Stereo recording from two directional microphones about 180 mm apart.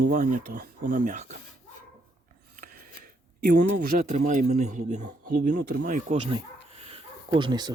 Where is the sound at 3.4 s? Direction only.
50° right (ahead or behind).